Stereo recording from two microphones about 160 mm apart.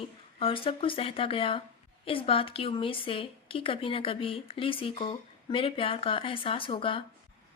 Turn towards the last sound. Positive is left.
turn(degrees=30)  # may be behind; listen again after turning